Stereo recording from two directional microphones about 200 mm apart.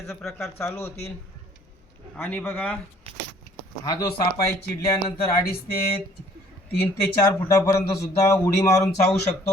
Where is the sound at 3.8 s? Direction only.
20° left (ahead or behind).